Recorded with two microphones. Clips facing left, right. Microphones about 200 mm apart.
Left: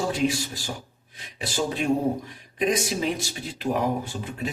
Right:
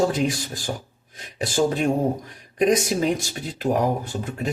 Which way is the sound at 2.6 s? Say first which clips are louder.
Right 5 dB; 45° right (ahead or behind).